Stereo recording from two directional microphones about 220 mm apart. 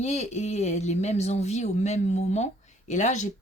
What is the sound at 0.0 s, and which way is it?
Speech, 30° left (ahead or behind).